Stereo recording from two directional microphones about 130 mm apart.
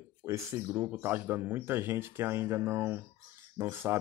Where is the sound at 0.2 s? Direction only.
20° right (ahead or behind).